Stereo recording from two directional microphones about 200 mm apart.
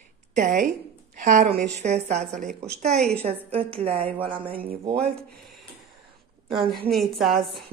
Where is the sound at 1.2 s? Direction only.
40° right (ahead or behind).